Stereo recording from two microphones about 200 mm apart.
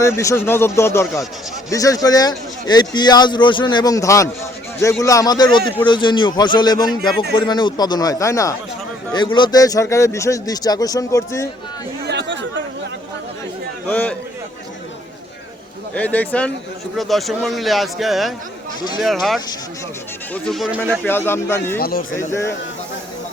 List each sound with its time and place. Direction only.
0.0 s speech: 15° left (ahead or behind)
12.0 s chatter: 60° right (ahead or behind)
13.8 s speech: 5° left (ahead or behind)
16.0 s a man's voice: 5° left (ahead or behind)
21.8 s speech: 50° left (ahead or behind)
22.1 s speech: 15° left (ahead or behind)